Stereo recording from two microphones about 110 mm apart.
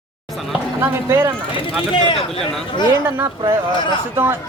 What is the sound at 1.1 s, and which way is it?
Speech, 25° right (ahead or behind).